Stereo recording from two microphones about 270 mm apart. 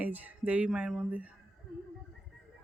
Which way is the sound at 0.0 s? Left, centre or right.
Centre.